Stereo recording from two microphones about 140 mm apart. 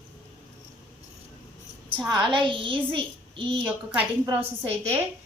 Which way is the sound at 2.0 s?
35° right (ahead or behind).